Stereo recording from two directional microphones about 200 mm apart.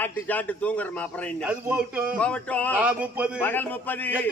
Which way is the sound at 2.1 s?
5° left (ahead or behind).